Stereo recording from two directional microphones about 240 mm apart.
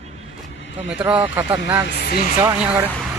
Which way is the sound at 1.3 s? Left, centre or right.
Centre.